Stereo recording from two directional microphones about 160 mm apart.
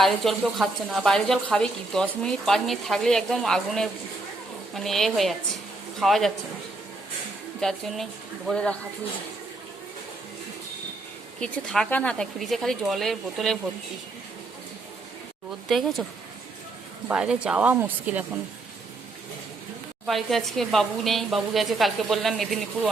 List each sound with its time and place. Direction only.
0.0 s speech: centre (ahead or behind)
7.6 s speech: centre (ahead or behind)
11.3 s speech: 5° left (ahead or behind)
15.7 s speech: centre (ahead or behind)
17.1 s speech: 5° right (ahead or behind)
20.1 s speech: centre (ahead or behind)